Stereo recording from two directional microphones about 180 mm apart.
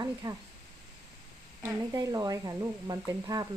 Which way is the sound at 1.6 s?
20° right (ahead or behind).